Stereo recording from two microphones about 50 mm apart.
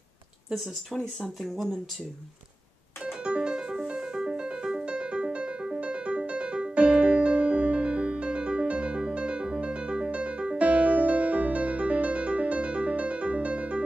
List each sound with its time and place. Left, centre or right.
0.9 s speech: centre
3.0 s music: centre